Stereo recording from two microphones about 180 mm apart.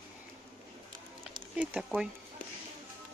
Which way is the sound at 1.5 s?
5° right (ahead or behind).